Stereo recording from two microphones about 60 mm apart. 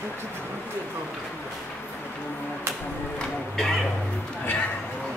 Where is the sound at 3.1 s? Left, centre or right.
Centre.